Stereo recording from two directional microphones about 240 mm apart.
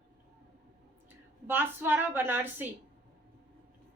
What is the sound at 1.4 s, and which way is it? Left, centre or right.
A woman's voice, centre.